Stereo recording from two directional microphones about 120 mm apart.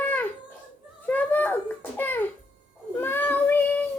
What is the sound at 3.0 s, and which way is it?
Child singing, 15° left (ahead or behind).